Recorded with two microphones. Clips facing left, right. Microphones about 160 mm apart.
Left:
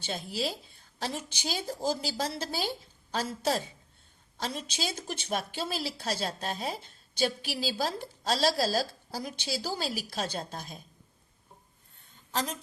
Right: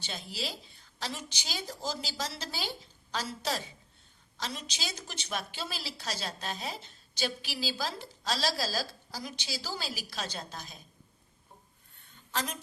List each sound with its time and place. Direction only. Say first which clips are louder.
0.0 s a woman's voice: left 6 dB; 50° left (ahead or behind)
12.3 s speech: left 3 dB; 35° left (ahead or behind)